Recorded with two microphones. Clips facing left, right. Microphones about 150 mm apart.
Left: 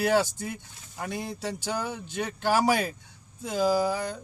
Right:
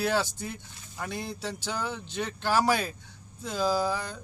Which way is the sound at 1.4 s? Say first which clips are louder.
Left 2 dB; 45° left (ahead or behind).